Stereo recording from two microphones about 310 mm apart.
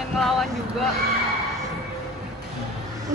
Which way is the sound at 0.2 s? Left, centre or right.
Centre.